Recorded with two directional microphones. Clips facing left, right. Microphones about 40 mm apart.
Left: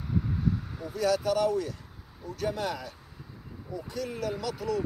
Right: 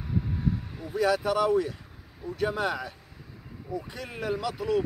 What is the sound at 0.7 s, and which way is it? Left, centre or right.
Speech, centre.